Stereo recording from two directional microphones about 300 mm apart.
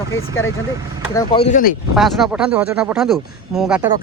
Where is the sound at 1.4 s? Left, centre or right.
Left.